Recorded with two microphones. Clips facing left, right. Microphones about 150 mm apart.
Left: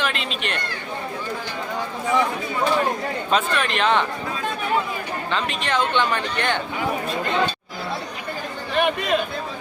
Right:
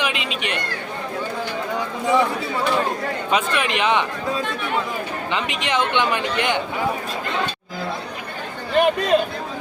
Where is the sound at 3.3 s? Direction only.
10° right (ahead or behind).